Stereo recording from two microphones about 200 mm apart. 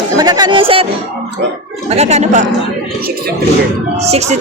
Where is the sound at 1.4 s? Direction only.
60° right (ahead or behind).